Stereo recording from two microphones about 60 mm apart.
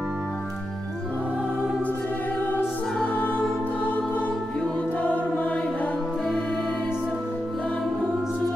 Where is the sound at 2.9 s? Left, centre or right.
Centre.